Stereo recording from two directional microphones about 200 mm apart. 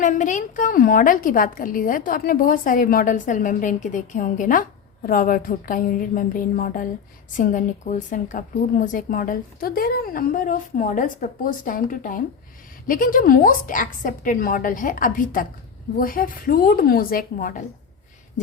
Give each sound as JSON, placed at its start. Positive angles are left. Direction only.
{"t": 0.0, "sound": "a woman's voice", "side_deg": 40}